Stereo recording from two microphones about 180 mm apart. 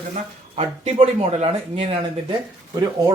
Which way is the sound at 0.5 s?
35° right (ahead or behind).